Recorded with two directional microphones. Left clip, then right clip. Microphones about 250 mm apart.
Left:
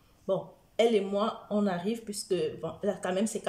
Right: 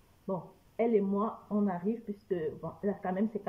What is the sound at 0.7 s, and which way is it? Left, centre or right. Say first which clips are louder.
Speech: left 4 dB; centre.